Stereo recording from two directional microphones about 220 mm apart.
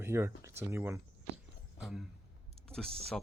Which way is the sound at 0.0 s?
10° right (ahead or behind).